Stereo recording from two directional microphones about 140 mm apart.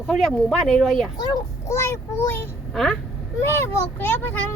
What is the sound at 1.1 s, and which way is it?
A child's voice, 30° left (ahead or behind).